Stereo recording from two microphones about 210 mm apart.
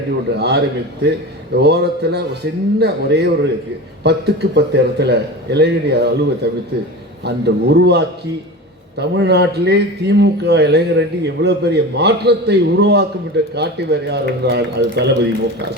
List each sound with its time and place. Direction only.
0.3 s a man's voice: 55° right (ahead or behind)